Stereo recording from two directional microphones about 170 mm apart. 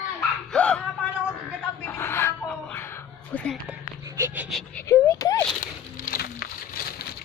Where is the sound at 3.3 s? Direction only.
5° left (ahead or behind).